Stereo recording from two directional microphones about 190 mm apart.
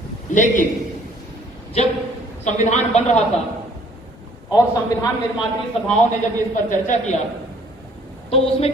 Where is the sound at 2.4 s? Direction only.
40° left (ahead or behind).